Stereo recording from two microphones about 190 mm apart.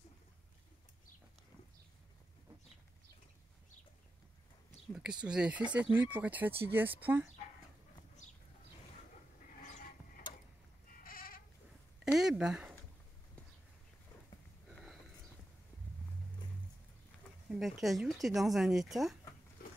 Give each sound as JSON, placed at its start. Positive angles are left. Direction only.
{"t": 4.9, "sound": "speech", "side_deg": -5}
{"t": 9.6, "sound": "a sound", "side_deg": 40}
{"t": 11.1, "sound": "goat", "side_deg": 50}
{"t": 12.0, "sound": "a sound", "side_deg": -5}
{"t": 14.7, "sound": "sniff", "side_deg": 0}
{"t": 17.5, "sound": "speech", "side_deg": 0}